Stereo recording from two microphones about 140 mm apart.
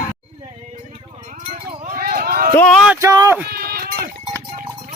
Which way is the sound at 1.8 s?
85° right.